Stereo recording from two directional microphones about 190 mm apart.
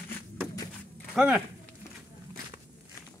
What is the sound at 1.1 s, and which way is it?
Speech, 5° right (ahead or behind).